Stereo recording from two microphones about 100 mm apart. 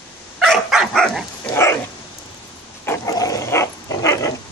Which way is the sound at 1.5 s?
25° left (ahead or behind).